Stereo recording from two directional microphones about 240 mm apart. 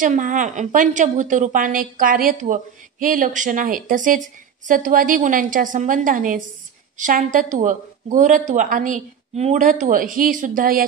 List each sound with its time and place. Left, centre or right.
0.0 s a woman's voice: right